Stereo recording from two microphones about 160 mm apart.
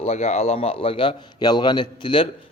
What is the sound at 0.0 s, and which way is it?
A man's voice, 40° left (ahead or behind).